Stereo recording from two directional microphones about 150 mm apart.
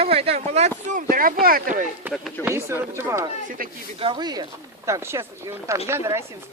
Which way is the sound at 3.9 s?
35° right (ahead or behind).